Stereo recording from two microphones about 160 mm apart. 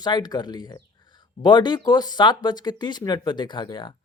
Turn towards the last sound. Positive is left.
turn(degrees=30)  # may be behind; listen again after turning